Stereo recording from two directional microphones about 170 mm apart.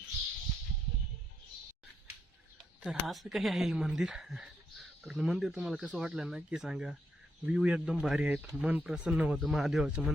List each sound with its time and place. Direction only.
2.8 s speech: centre (ahead or behind)